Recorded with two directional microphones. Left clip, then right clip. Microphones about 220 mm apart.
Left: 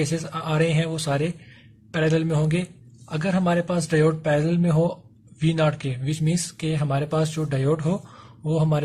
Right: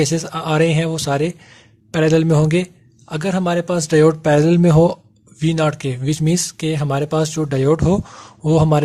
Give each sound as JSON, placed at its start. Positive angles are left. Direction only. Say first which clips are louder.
{"t": 0.0, "sound": "speech", "louder": "right 7 dB", "side_deg": -45}